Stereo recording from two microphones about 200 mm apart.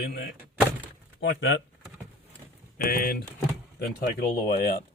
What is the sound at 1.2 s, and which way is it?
Speech, 55° left (ahead or behind).